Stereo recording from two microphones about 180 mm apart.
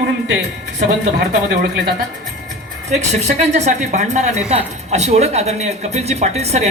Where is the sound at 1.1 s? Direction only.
70° right (ahead or behind).